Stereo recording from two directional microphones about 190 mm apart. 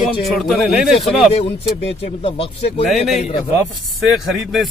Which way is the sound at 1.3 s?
30° left (ahead or behind).